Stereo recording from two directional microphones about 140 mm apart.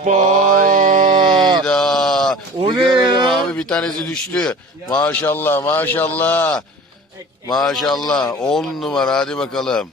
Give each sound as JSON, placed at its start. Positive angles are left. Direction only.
{"t": 0.0, "sound": "mantra", "side_deg": -55}
{"t": 1.2, "sound": "a sound", "side_deg": -35}
{"t": 1.6, "sound": "sheep", "side_deg": 5}
{"t": 2.6, "sound": "a sound", "side_deg": -35}
{"t": 3.2, "sound": "a man's voice", "side_deg": 5}
{"t": 7.5, "sound": "speech", "side_deg": 0}